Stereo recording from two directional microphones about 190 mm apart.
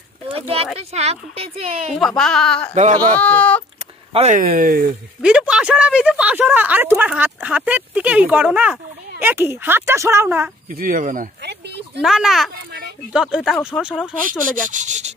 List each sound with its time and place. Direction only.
0.7 s speech: 35° right (ahead or behind)
2.0 s speech: centre (ahead or behind)
4.1 s speech: 35° right (ahead or behind)
4.4 s speech: 50° right (ahead or behind)
5.2 s speech: 5° right (ahead or behind)
10.7 s speech: 50° right (ahead or behind)
11.4 s a sound: 60° right (ahead or behind)
12.0 s speech: centre (ahead or behind)
14.5 s speech: 40° right (ahead or behind)